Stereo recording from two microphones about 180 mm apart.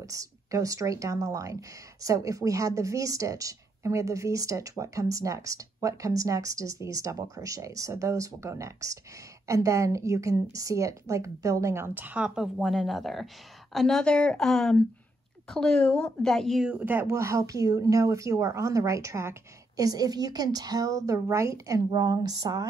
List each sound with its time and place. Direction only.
0.0 s a woman's voice: 20° right (ahead or behind)